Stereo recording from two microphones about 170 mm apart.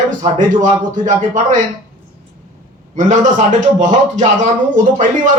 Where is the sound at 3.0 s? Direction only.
50° right (ahead or behind).